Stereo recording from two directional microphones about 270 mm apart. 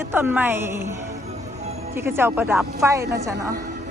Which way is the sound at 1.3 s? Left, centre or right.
Right.